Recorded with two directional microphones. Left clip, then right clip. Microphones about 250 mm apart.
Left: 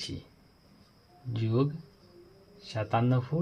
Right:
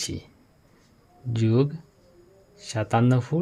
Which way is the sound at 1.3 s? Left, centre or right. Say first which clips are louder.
Right 7 dB; right.